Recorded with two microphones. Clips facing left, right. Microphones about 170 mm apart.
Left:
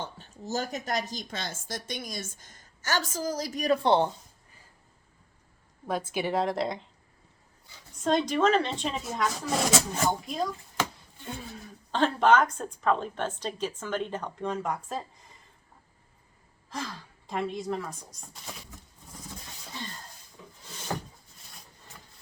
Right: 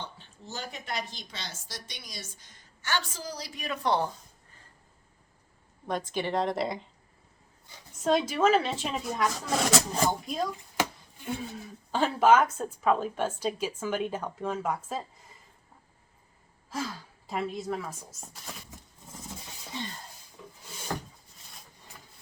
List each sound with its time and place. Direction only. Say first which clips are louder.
0.0 s a woman's voice: left 4 dB; 45° left (ahead or behind)
3.8 s speech: left 2 dB; 25° left (ahead or behind)
5.9 s speech: left 1 dB; 5° left (ahead or behind)
8.0 s speech: even; 5° right (ahead or behind)
10.8 s a sound: right 2 dB; 10° right (ahead or behind)
11.3 s speech: right 3 dB; centre (ahead or behind)
16.6 s speech: right 2 dB; 5° right (ahead or behind)
20.9 s a sound: left 1 dB; 15° left (ahead or behind)